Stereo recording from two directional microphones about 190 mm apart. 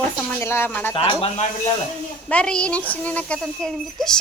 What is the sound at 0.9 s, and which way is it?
Speech, 30° left (ahead or behind).